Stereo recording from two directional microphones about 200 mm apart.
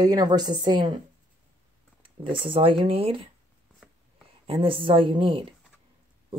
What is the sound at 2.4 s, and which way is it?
Speech, 25° right (ahead or behind).